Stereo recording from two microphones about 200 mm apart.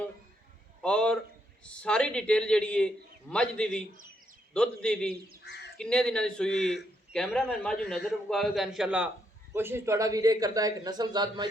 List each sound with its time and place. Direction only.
0.8 s a man's voice: 5° left (ahead or behind); by 11.4 s 20° right (ahead or behind)